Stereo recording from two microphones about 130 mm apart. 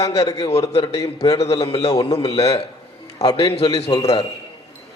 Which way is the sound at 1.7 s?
50° left (ahead or behind).